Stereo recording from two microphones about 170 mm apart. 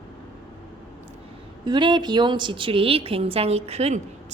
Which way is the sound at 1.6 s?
25° right (ahead or behind).